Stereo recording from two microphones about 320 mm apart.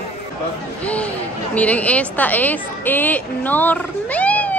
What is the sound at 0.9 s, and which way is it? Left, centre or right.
A woman's voice, centre.